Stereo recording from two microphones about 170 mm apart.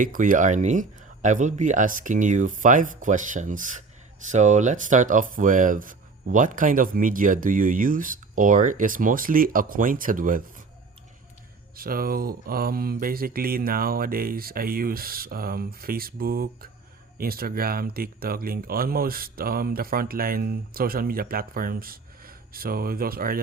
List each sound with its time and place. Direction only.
0.0 s speech: 50° right (ahead or behind)
11.8 s speech: 60° right (ahead or behind)